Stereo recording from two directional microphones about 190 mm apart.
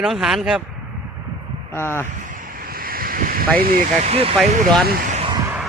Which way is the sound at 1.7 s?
10° left (ahead or behind).